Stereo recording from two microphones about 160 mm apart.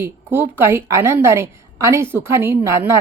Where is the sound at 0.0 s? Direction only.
15° right (ahead or behind).